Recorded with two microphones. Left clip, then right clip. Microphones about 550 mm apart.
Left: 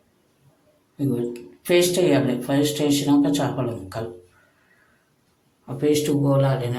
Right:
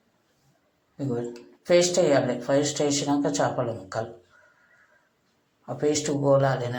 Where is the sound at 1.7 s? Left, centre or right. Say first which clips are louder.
Left 1 dB; left.